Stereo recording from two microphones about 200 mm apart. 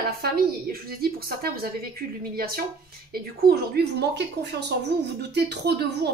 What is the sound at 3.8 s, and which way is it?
A woman's voice, 55° right (ahead or behind).